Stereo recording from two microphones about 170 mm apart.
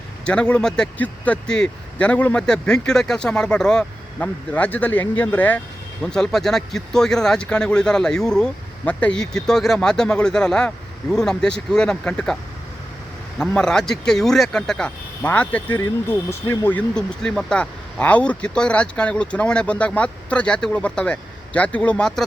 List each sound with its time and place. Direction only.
0.3 s speech: 5° left (ahead or behind)
13.4 s speech: 5° left (ahead or behind)